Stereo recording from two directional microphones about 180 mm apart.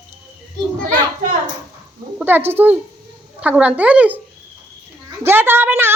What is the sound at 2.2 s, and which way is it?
A woman's voice, 10° right (ahead or behind).